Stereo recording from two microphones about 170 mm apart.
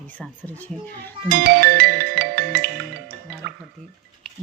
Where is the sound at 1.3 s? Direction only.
70° right (ahead or behind).